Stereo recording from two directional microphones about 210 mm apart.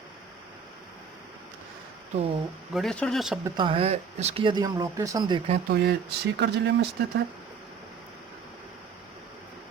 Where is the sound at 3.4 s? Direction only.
25° right (ahead or behind).